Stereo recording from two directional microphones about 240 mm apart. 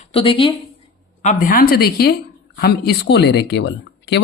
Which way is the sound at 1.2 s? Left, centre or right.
Left.